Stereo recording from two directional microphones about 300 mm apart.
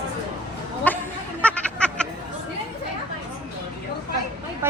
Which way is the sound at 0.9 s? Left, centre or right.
Centre.